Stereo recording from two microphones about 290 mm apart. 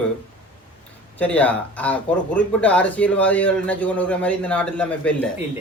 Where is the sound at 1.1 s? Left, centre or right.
Centre.